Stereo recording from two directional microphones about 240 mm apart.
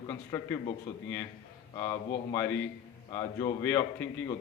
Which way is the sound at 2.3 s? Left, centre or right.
Centre.